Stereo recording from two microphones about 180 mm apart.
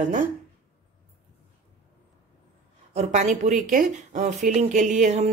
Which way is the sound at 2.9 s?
40° right (ahead or behind).